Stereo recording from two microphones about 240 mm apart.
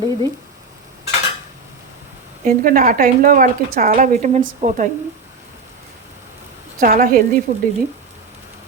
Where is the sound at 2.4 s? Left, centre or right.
Right.